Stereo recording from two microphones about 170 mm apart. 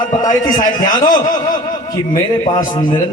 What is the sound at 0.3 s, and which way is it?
Speech, 50° left (ahead or behind).